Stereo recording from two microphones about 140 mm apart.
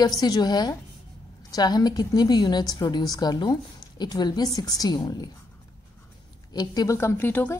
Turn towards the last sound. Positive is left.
turn(degrees=15)  # may be behind; listen again after turning